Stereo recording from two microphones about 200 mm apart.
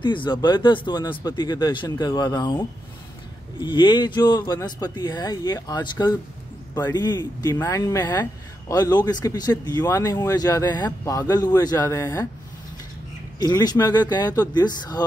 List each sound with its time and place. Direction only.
0.0 s speech: 25° left (ahead or behind)
3.6 s speech: 20° left (ahead or behind)
13.4 s speech: 20° left (ahead or behind)